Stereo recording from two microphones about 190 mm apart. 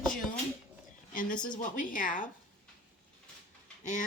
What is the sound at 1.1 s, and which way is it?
A woman's voice, 45° left (ahead or behind).